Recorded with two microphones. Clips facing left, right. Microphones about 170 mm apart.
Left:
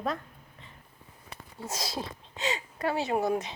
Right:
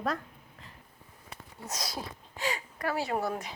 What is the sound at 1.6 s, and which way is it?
Speech, 25° left (ahead or behind).